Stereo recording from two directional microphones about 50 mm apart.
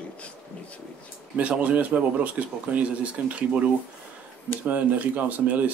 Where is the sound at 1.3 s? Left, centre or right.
Right.